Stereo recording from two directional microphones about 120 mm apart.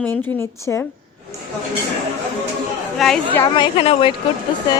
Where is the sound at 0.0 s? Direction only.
15° left (ahead or behind).